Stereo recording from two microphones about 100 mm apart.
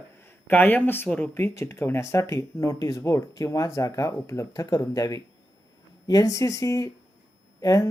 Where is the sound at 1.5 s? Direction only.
25° left (ahead or behind).